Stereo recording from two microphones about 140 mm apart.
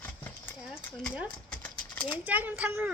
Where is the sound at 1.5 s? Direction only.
10° left (ahead or behind).